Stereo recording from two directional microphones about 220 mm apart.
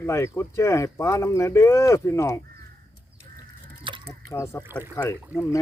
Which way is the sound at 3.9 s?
25° right (ahead or behind).